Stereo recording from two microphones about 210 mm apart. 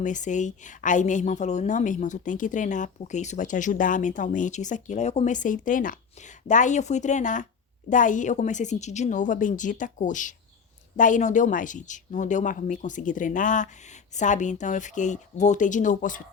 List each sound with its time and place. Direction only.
0.0 s speech: 35° left (ahead or behind)